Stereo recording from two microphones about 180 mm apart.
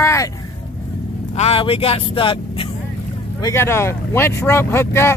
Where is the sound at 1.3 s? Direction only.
35° left (ahead or behind).